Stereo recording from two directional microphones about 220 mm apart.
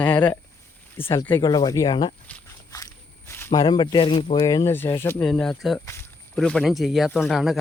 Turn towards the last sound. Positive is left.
turn(degrees=0)  # may be behind; listen again after turning